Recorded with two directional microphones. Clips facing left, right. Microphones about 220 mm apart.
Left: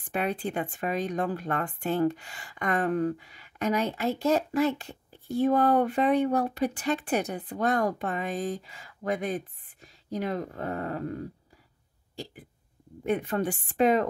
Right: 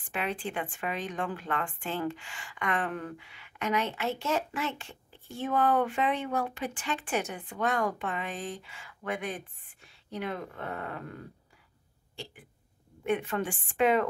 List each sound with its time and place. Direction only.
0.0 s speech: 40° left (ahead or behind)
13.0 s speech: 35° left (ahead or behind)